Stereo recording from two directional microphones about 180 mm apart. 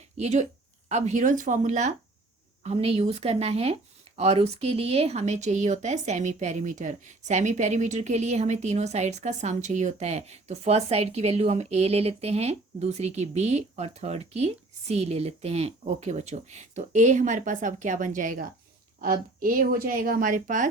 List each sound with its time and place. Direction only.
0.2 s speech: 40° right (ahead or behind)